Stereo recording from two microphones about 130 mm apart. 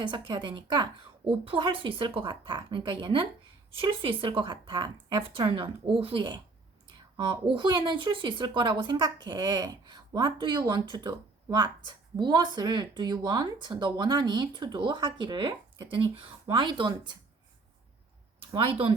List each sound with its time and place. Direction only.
0.0 s speech: 40° right (ahead or behind)
18.3 s speech: 45° right (ahead or behind)